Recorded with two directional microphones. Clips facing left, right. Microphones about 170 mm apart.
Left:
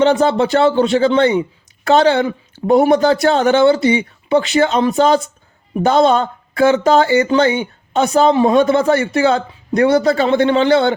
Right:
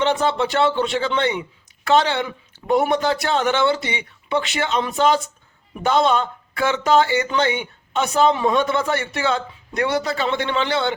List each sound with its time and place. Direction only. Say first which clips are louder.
0.0 s speech: left 7 dB; 40° left (ahead or behind)